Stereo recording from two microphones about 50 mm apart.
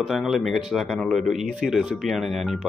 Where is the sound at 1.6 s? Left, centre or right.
Centre.